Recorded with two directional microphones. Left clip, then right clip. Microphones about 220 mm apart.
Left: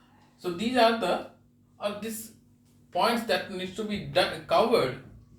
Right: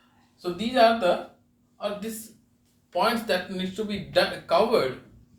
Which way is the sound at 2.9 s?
25° right (ahead or behind).